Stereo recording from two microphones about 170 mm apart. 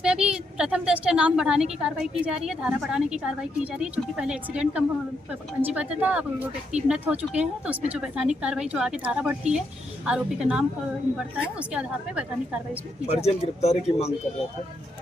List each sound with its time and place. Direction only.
0.0 s a woman's voice: 5° right (ahead or behind)
11.7 s a woman's voice: 5° right (ahead or behind)
13.1 s speech: 40° left (ahead or behind)